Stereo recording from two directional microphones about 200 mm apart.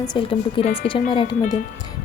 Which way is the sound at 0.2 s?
25° left (ahead or behind).